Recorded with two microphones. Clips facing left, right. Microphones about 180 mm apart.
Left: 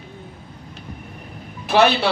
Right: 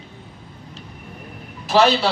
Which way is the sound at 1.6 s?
60° left (ahead or behind).